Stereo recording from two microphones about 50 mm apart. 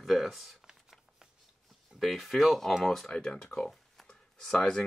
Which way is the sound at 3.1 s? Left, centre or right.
Centre.